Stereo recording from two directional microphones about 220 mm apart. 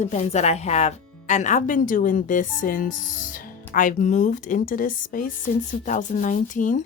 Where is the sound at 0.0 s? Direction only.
30° left (ahead or behind).